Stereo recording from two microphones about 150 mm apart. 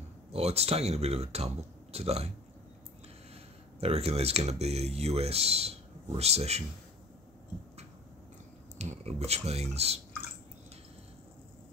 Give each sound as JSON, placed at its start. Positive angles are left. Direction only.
{"t": 0.3, "sound": "speech", "side_deg": -45}
{"t": 3.8, "sound": "speech", "side_deg": -40}
{"t": 8.7, "sound": "speech", "side_deg": -45}